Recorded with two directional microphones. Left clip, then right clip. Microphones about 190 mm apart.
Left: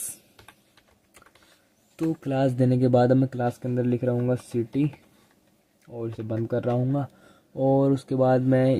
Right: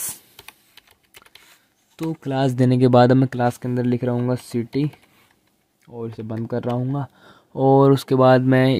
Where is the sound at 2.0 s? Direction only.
25° right (ahead or behind).